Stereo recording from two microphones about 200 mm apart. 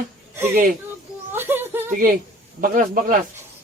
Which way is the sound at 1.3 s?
10° right (ahead or behind).